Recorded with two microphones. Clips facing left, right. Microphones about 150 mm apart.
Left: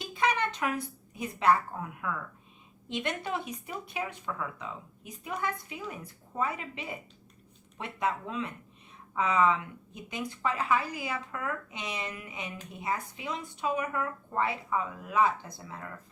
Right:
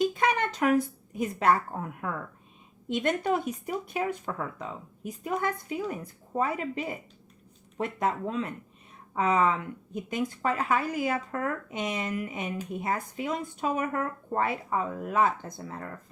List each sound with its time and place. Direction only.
0.0 s a woman's voice: 45° right (ahead or behind)